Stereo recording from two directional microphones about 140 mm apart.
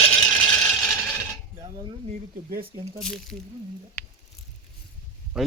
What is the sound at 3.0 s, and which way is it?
Speech, centre (ahead or behind).